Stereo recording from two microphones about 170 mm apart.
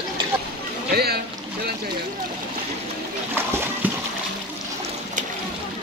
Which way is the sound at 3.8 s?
10° right (ahead or behind).